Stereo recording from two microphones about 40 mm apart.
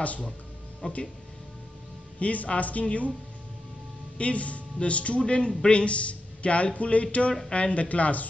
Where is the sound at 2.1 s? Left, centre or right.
Left.